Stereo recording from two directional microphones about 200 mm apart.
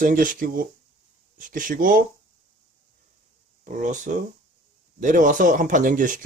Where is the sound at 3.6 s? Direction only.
40° right (ahead or behind).